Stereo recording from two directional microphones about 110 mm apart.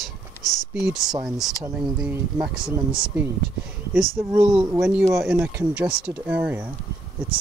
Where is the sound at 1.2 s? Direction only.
5° right (ahead or behind).